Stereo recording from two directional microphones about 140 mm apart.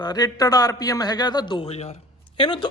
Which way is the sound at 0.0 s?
30° left (ahead or behind).